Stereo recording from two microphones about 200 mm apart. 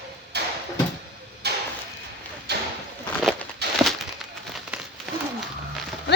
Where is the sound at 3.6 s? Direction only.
55° right (ahead or behind).